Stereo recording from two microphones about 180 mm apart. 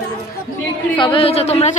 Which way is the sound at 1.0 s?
30° left (ahead or behind).